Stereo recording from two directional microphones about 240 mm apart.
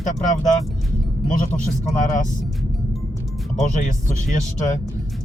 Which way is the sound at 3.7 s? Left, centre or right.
Left.